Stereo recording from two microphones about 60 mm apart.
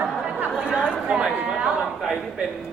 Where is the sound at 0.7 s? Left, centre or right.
Centre.